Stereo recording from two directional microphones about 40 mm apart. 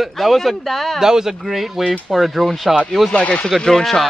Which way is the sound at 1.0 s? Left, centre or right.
Centre.